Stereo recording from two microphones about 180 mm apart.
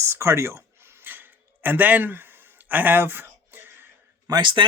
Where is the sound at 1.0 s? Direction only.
10° right (ahead or behind).